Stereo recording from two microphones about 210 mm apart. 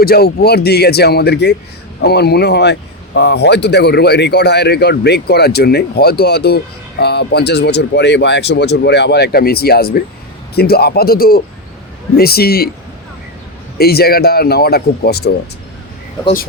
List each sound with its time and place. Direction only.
0.0 s speech: 45° left (ahead or behind)
13.7 s speech: 50° left (ahead or behind)